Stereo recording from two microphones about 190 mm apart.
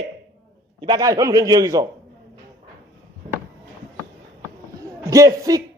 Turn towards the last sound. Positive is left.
turn(degrees=-20)  # may be behind; listen again after turning